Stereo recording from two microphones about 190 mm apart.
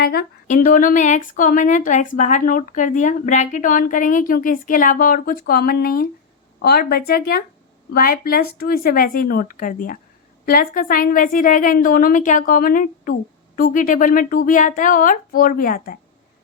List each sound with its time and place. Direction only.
0.0 s speech: 55° left (ahead or behind)